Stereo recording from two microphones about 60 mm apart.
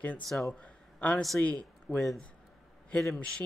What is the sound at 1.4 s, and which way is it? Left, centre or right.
Speech, left.